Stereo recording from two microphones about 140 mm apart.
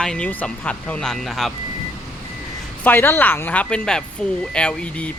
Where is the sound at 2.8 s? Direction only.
15° left (ahead or behind).